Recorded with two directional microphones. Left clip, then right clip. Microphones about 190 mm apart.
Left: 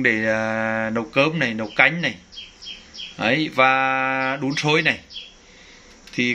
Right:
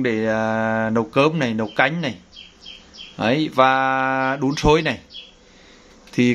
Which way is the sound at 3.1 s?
20° right (ahead or behind).